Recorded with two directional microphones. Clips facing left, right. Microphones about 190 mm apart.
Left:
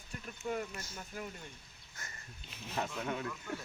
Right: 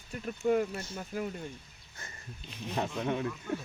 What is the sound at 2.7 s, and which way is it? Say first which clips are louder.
Speech: right 5 dB; 25° right (ahead or behind).